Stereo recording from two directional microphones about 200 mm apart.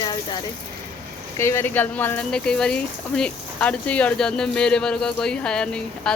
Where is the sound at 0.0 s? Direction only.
20° left (ahead or behind).